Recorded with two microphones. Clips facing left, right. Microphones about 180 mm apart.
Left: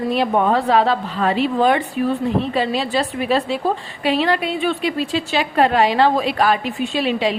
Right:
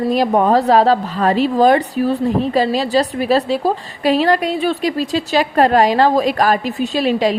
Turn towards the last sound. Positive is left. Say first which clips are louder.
# right 3 dB
turn(degrees=-40)  # may be behind; listen again after turning